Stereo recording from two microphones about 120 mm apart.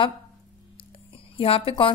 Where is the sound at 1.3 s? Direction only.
50° left (ahead or behind).